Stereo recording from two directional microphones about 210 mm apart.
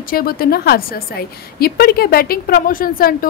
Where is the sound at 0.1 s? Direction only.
45° left (ahead or behind).